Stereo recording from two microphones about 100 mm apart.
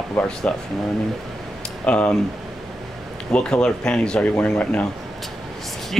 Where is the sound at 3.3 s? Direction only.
10° left (ahead or behind).